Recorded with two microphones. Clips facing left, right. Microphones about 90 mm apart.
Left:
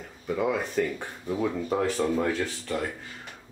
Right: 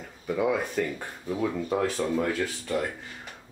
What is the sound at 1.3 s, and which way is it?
Speech, 5° left (ahead or behind).